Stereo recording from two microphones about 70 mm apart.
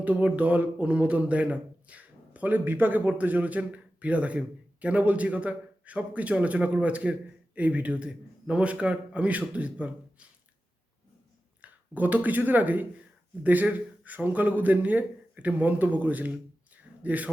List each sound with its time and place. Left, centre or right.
0.0 s speech: centre
11.6 s speech: right